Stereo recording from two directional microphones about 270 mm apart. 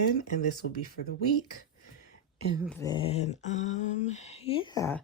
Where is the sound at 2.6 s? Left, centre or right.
Centre.